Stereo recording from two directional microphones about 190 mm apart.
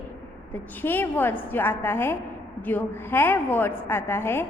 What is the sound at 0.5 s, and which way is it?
A woman's voice, 10° left (ahead or behind).